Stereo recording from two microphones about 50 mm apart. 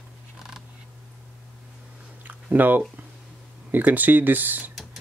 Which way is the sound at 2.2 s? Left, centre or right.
Right.